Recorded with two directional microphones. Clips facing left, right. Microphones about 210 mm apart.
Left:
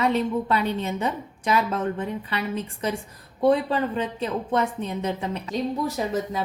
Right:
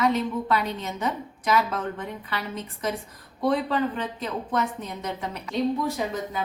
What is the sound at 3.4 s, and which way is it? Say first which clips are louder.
Speech: left 3 dB; 25° left (ahead or behind).